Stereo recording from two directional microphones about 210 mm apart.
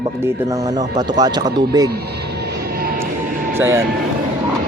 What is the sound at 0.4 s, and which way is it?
Speech, 15° right (ahead or behind).